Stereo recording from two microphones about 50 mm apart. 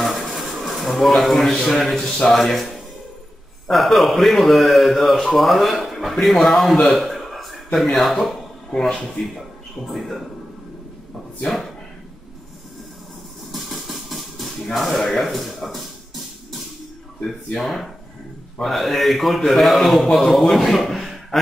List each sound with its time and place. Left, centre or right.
0.0 s a sound: centre
1.7 s a man's voice: centre
2.0 s speech: centre
2.3 s a man's voice: centre
3.6 s a man's voice: centre
6.9 s a sound: centre
7.8 s speech: centre
9.8 s a man's voice: centre
13.5 s a sound: centre
17.6 s a man's voice: centre